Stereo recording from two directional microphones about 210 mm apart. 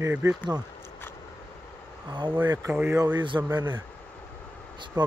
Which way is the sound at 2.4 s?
20° right (ahead or behind).